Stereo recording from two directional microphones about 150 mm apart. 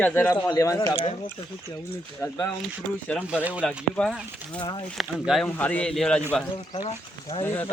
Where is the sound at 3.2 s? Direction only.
10° right (ahead or behind).